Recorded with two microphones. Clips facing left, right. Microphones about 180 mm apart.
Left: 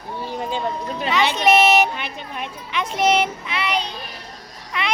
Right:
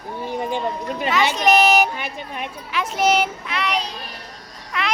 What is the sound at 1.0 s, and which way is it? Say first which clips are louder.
A child's voice: even; 5° right (ahead or behind).